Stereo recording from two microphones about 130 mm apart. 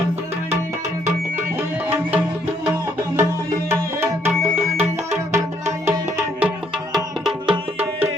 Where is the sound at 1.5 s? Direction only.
15° right (ahead or behind).